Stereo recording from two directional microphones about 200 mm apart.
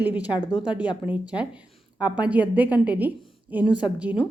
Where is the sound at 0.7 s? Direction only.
5° right (ahead or behind).